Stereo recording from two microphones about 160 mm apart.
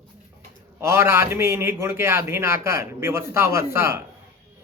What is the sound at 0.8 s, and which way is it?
A man's voice, 15° right (ahead or behind).